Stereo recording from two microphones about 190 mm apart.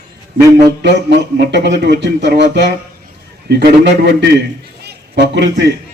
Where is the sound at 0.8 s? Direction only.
65° right (ahead or behind).